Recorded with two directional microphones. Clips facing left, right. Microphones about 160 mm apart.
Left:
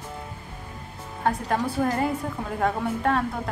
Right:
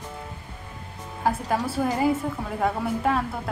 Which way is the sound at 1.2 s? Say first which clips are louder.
Even; 5° right (ahead or behind).